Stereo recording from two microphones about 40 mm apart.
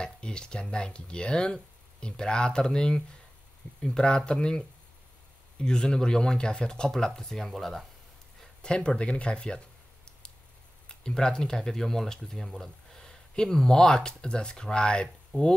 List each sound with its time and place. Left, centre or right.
0.0 s speech: left
7.2 s speech: centre
8.4 s speech: left
10.9 s speech: centre